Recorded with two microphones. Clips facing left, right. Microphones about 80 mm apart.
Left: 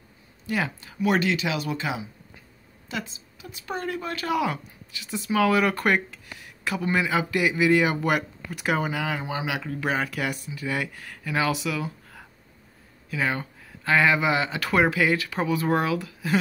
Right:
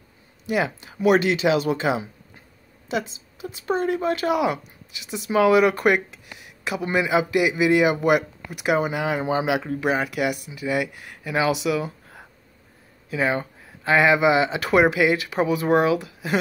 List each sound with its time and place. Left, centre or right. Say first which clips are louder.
0.7 s a woman's voice: right 6 dB; right
9.2 s speech: right 7 dB; right
9.8 s a woman's voice: right 4 dB; centre